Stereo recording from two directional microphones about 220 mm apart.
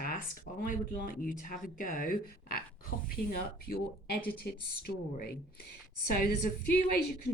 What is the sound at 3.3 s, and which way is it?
Speech, 40° left (ahead or behind).